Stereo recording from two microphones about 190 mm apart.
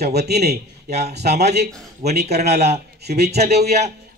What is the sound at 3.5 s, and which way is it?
Speech, 60° right (ahead or behind).